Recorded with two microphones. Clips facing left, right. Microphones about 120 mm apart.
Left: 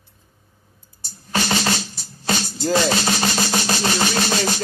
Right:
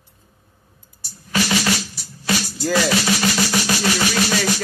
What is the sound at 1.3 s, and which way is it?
Music, 30° left (ahead or behind).